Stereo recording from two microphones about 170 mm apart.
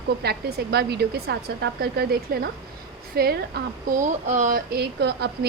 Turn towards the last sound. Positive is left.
turn(degrees=-75)  # may be behind; listen again after turning